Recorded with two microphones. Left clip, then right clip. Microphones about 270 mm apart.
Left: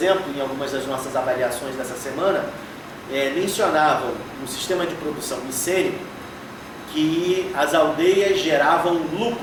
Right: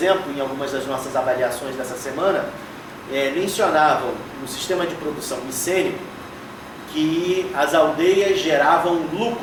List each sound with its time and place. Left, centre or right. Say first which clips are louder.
0.0 s speech: right 1 dB; centre
6.9 s speech: even; centre